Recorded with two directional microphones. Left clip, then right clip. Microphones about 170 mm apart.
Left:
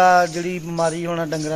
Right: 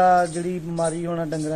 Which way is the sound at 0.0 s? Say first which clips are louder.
Left 3 dB; 15° left (ahead or behind).